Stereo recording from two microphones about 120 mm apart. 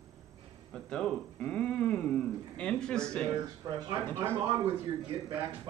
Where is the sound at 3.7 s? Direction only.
30° right (ahead or behind).